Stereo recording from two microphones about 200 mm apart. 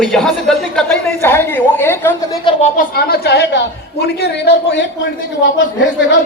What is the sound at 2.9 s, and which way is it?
A man's voice, 50° left (ahead or behind).